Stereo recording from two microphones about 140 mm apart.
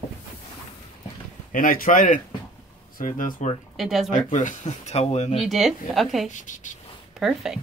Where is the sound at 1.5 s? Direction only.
75° left (ahead or behind).